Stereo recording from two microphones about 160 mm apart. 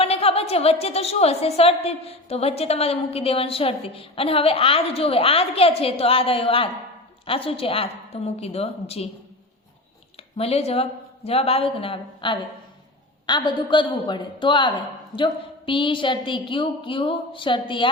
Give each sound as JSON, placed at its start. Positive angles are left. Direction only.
{"t": 0.0, "sound": "a woman's voice", "side_deg": 40}
{"t": 10.3, "sound": "a woman's voice", "side_deg": 40}